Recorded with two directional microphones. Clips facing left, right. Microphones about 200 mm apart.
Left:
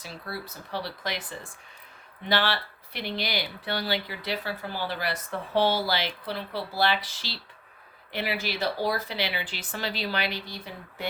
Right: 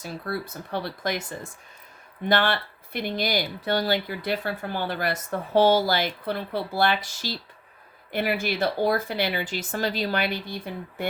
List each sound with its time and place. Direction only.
0.0 s speech: 50° right (ahead or behind)